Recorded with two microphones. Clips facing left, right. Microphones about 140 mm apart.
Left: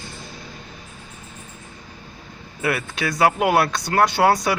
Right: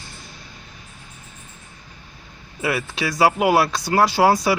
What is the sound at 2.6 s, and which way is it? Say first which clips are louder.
Speech: even; 15° right (ahead or behind).